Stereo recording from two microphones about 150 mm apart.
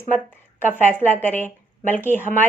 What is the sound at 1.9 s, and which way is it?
Speech, 10° left (ahead or behind).